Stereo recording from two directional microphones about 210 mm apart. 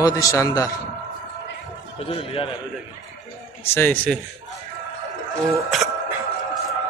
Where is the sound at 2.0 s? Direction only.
25° left (ahead or behind).